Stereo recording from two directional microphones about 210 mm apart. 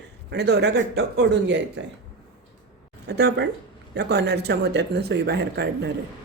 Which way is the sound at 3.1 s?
55° right (ahead or behind).